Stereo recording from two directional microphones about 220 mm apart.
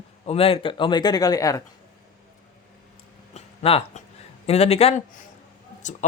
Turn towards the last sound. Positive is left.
turn(degrees=35)  # may be behind; listen again after turning